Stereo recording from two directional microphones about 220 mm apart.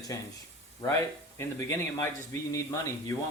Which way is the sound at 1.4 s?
15° left (ahead or behind).